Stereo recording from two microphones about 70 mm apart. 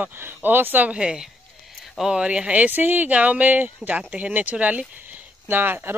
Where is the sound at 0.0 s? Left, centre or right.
Right.